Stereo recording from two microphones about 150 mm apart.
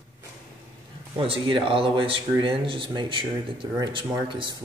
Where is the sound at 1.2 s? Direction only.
35° right (ahead or behind).